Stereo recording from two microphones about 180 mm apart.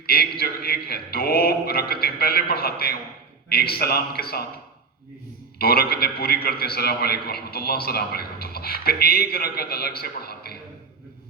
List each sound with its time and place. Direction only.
0.0 s a man's voice: 60° left (ahead or behind)
5.5 s a man's voice: 60° left (ahead or behind)